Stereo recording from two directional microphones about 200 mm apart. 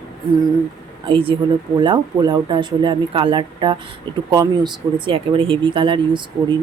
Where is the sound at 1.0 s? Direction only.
25° right (ahead or behind).